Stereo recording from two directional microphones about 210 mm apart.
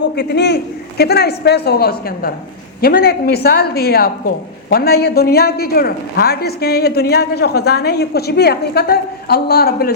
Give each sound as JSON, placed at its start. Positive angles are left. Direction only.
{"t": 0.0, "sound": "a woman's voice", "side_deg": 55}